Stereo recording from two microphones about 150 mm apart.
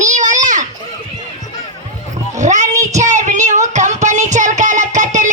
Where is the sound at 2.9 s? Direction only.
55° right (ahead or behind).